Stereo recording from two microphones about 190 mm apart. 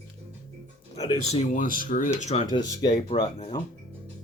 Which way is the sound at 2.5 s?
20° left (ahead or behind).